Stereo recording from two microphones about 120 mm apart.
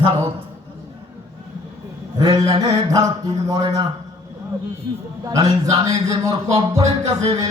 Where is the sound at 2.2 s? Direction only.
30° right (ahead or behind).